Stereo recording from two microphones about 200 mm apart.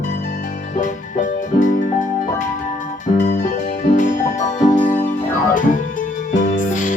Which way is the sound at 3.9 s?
40° left (ahead or behind).